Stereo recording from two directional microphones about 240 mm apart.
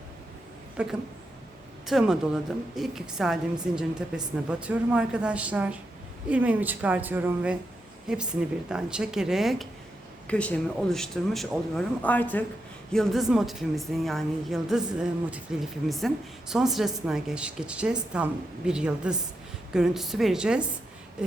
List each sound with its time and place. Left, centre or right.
0.8 s a woman's voice: centre